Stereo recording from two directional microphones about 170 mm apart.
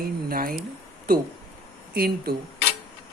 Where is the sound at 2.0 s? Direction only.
65° right (ahead or behind).